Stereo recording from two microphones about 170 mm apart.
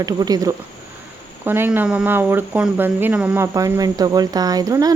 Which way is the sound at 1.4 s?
10° right (ahead or behind).